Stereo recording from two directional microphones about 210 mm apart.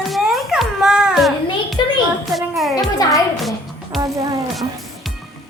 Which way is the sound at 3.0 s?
15° left (ahead or behind).